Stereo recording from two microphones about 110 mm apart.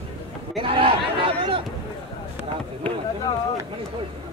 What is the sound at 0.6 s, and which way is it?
Speech, 55° right (ahead or behind).